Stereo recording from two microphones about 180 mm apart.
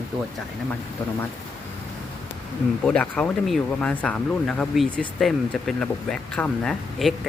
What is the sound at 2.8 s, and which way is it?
Speech, 5° left (ahead or behind).